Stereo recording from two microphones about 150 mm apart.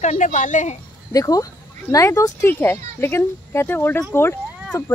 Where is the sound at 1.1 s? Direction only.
25° left (ahead or behind).